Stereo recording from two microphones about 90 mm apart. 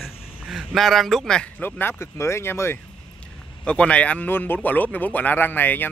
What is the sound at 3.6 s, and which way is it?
A man's voice, 15° left (ahead or behind).